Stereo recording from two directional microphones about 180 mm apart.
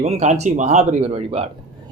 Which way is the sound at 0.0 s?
40° right (ahead or behind).